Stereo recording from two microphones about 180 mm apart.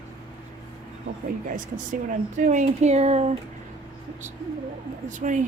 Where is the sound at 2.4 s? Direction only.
40° right (ahead or behind).